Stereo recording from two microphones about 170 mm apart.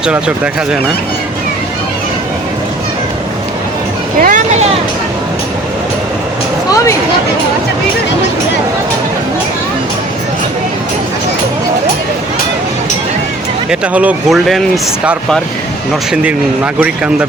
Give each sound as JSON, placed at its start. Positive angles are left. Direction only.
{"t": 4.2, "sound": "speech", "side_deg": -50}
{"t": 13.7, "sound": "speech", "side_deg": -5}
{"t": 16.8, "sound": "speech", "side_deg": -5}